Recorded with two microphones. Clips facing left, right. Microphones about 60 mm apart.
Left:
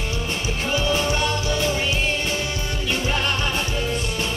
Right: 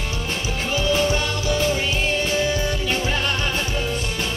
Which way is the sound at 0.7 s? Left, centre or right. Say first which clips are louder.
Right 2 dB; left.